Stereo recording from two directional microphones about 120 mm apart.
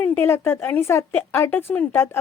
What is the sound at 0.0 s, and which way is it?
A woman's voice, 15° left (ahead or behind).